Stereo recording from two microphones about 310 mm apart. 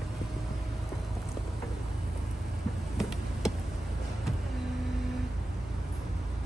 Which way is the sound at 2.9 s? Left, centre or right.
Centre.